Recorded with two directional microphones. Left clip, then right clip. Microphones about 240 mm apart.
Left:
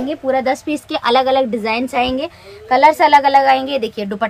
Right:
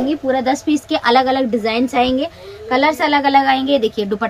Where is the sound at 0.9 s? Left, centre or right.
Left.